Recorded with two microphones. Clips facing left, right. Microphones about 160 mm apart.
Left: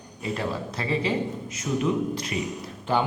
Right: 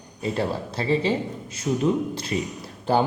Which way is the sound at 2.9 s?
35° right (ahead or behind).